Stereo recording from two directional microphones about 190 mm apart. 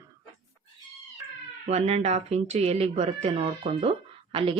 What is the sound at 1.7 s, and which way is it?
Speech, 35° right (ahead or behind).